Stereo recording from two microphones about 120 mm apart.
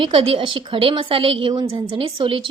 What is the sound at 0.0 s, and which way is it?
A woman's voice, 50° right (ahead or behind).